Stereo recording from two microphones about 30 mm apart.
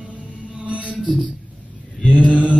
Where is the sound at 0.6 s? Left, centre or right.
Right.